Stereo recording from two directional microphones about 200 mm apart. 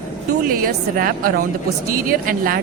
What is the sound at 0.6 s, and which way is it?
Speech, 45° right (ahead or behind).